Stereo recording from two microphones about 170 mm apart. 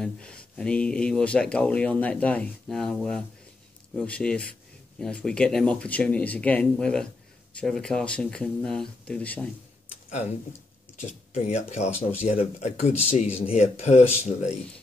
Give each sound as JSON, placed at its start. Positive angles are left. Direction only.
{"t": 0.0, "sound": "speech", "side_deg": 5}
{"t": 11.0, "sound": "speech", "side_deg": 45}